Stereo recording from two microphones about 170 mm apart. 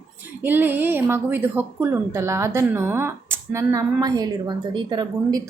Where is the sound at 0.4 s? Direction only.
10° right (ahead or behind).